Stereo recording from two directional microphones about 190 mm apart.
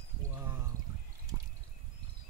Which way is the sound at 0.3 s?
15° right (ahead or behind).